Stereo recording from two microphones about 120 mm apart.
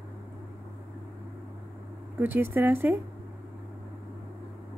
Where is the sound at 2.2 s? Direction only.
15° right (ahead or behind).